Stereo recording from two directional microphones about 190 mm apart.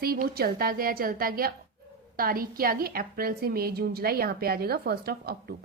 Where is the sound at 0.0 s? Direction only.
50° right (ahead or behind).